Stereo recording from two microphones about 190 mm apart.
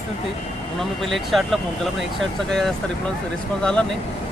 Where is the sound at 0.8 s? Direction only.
Centre (ahead or behind).